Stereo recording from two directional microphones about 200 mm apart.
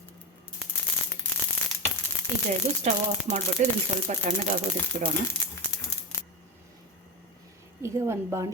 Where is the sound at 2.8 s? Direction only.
35° right (ahead or behind).